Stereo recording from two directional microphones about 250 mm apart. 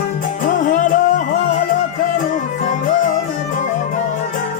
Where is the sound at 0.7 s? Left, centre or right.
Left.